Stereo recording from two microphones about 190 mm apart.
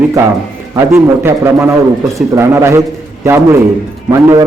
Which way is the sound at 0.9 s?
15° right (ahead or behind).